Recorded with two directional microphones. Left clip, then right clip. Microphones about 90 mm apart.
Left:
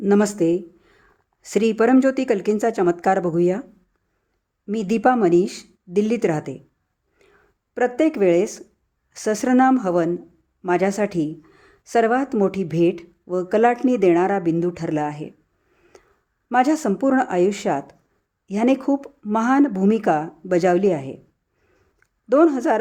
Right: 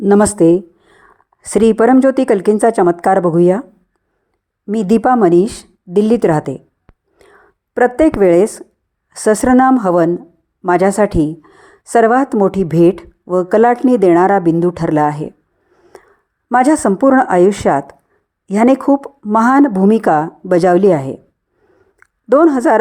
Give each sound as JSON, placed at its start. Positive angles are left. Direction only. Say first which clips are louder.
{"t": 0.1, "sound": "a woman's voice", "louder": "right 9 dB", "side_deg": -50}
{"t": 4.7, "sound": "a woman's voice", "louder": "right 6 dB", "side_deg": -45}
{"t": 16.5, "sound": "a woman's voice", "louder": "right 7 dB", "side_deg": -40}
{"t": 22.3, "sound": "a woman's voice", "louder": "right 7 dB", "side_deg": -40}